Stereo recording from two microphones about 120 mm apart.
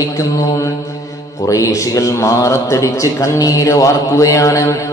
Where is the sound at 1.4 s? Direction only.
25° left (ahead or behind).